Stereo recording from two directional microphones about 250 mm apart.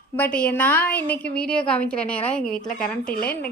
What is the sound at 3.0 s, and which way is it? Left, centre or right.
Speech, left.